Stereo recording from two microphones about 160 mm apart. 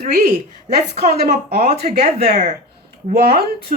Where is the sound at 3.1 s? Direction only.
80° right.